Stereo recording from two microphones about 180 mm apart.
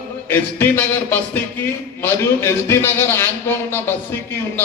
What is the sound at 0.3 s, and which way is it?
A man's voice, 10° left (ahead or behind).